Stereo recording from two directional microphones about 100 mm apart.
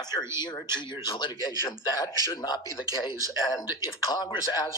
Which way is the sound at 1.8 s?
35° left (ahead or behind).